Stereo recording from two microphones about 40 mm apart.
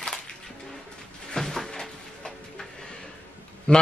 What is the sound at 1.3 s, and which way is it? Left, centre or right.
Cupboard open or close, centre.